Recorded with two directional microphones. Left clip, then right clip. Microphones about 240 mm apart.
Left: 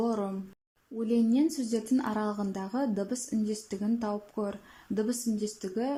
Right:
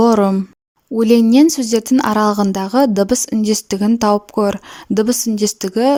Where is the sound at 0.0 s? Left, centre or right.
Right.